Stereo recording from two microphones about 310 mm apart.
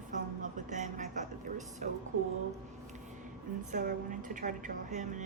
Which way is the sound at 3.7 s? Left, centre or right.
Right.